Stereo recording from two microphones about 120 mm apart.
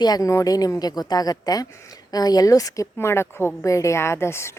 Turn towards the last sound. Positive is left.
turn(degrees=20)  # may be behind; listen again after turning